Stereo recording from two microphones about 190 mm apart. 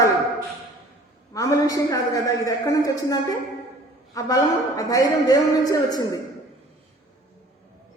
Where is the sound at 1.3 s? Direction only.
15° left (ahead or behind).